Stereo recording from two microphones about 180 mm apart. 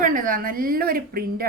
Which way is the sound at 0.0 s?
50° right (ahead or behind).